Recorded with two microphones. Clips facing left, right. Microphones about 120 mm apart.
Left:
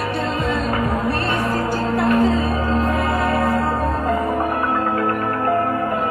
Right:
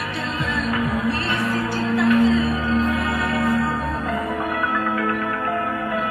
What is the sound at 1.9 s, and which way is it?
Music, 45° left (ahead or behind).